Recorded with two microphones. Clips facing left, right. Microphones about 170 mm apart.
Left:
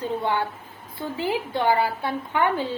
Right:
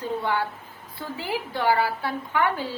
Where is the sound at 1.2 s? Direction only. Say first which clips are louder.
Left 3 dB; 20° left (ahead or behind).